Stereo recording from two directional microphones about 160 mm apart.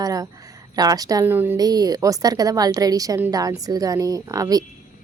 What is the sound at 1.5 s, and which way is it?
A woman's voice, 25° right (ahead or behind).